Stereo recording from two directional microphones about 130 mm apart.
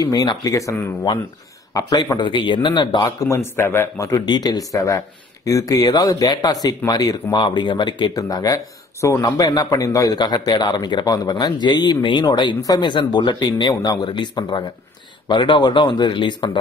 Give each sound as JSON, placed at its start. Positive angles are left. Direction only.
{"t": 0.0, "sound": "speech", "side_deg": 30}
{"t": 3.3, "sound": "speech", "side_deg": 20}